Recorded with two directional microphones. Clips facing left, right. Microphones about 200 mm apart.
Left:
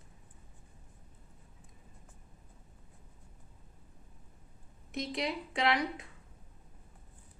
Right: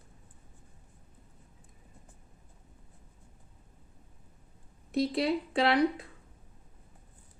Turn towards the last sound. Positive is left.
turn(degrees=-30)  # may be behind; listen again after turning